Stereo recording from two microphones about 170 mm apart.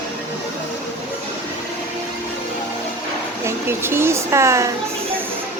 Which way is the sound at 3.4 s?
15° right (ahead or behind).